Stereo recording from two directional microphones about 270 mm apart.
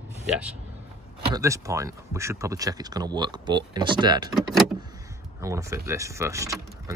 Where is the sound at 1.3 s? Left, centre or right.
Centre.